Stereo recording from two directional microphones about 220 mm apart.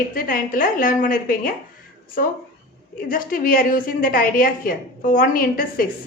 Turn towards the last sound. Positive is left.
turn(degrees=40)  # may be behind; listen again after turning